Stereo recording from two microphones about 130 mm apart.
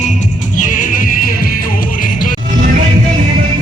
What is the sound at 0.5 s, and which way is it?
Music, 90° left.